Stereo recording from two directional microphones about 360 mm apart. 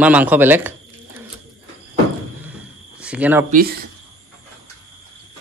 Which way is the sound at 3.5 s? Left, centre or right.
Right.